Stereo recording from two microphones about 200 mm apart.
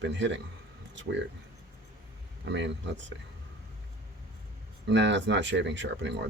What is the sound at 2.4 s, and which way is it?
Speech, 65° right (ahead or behind).